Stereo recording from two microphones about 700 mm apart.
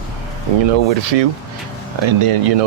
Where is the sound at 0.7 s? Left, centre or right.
Right.